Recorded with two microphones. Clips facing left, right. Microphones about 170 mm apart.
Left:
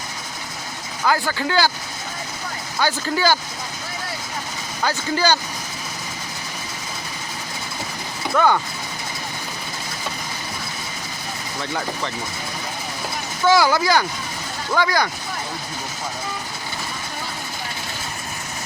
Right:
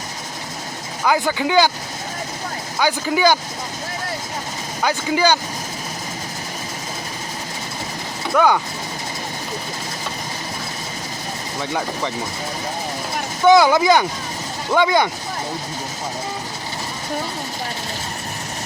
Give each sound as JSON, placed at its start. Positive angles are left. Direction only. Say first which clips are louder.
{"t": 1.0, "sound": "speech", "louder": "right 2 dB", "side_deg": -15}
{"t": 2.8, "sound": "speech", "louder": "right 3 dB", "side_deg": -15}
{"t": 4.8, "sound": "speech", "louder": "right 3 dB", "side_deg": -10}
{"t": 8.4, "sound": "speech", "louder": "right 2 dB", "side_deg": -10}
{"t": 11.6, "sound": "speech", "louder": "right 3 dB", "side_deg": -15}
{"t": 13.4, "sound": "speech", "louder": "right 4 dB", "side_deg": -20}